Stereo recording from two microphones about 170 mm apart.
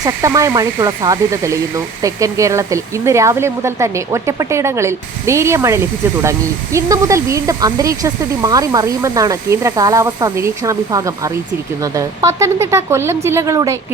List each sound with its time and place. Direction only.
0.0 s speech: 15° right (ahead or behind)